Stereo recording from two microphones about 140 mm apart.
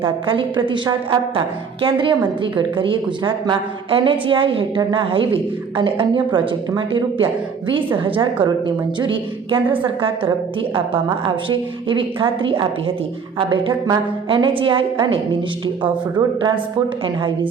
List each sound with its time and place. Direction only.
0.0 s a woman's voice: 35° right (ahead or behind)